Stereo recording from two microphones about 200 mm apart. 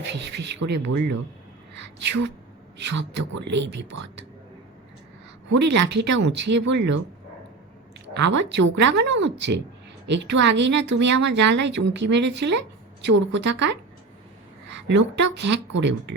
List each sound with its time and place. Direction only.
0.1 s speech: 60° right (ahead or behind)
2.0 s speech: 60° right (ahead or behind)
5.5 s speech: 60° right (ahead or behind)
8.1 s speech: 60° right (ahead or behind)
14.7 s speech: 60° right (ahead or behind)